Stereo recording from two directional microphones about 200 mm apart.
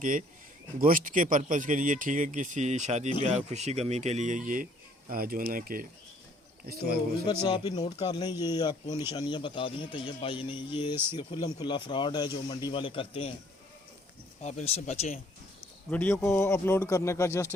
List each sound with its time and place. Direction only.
0.0 s speech: 40° right (ahead or behind)
7.4 s speech: 20° left (ahead or behind)
14.4 s speech: 35° left (ahead or behind)
15.9 s speech: 5° left (ahead or behind)